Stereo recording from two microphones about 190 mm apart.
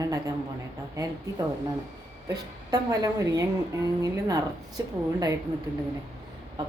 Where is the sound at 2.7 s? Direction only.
20° right (ahead or behind).